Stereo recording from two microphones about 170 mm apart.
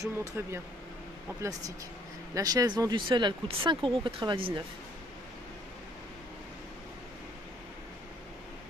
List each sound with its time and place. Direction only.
0.0 s speech: 20° right (ahead or behind)
2.3 s speech: 20° right (ahead or behind)